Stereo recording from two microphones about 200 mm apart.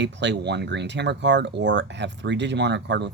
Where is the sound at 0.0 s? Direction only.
60° right (ahead or behind).